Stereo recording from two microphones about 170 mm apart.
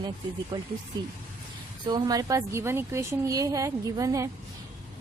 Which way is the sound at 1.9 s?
25° right (ahead or behind).